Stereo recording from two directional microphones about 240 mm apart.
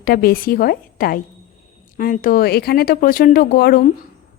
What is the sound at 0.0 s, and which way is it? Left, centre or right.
A woman's voice, left.